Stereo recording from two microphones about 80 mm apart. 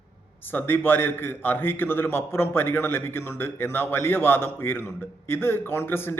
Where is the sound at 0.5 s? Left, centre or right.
Left.